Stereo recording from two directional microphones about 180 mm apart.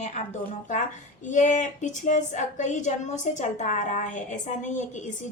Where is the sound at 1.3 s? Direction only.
45° left (ahead or behind).